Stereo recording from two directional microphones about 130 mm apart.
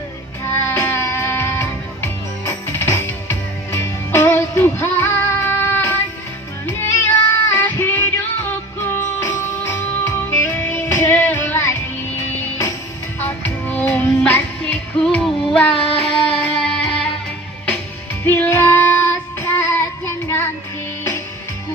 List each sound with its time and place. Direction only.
0.4 s music: 20° left (ahead or behind)
7.3 s music: 15° left (ahead or behind)
13.1 s music: 15° left (ahead or behind)
18.3 s child singing: 15° left (ahead or behind)